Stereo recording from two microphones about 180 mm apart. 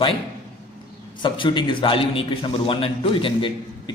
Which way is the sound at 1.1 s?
25° left (ahead or behind).